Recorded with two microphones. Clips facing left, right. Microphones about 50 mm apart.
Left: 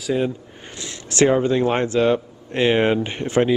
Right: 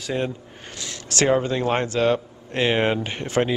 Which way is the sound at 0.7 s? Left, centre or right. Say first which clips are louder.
Left 5 dB; left.